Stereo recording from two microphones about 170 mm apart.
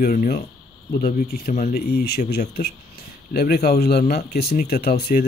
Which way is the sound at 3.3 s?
65° left (ahead or behind).